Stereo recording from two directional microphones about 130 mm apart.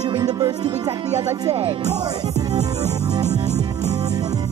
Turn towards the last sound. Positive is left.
turn(degrees=-60)  # may be behind; listen again after turning